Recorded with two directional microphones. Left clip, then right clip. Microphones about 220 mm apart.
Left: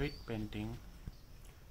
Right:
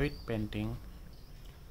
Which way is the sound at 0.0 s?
20° right (ahead or behind).